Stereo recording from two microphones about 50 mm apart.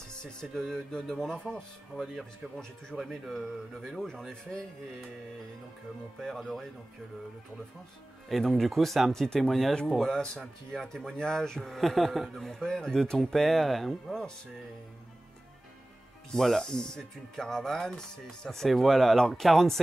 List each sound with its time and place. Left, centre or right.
0.1 s a man's voice: centre
2.9 s a man's voice: centre
6.1 s a man's voice: centre
8.3 s a man's voice: centre
14.0 s a man's voice: centre
16.3 s a man's voice: centre
18.7 s speech: centre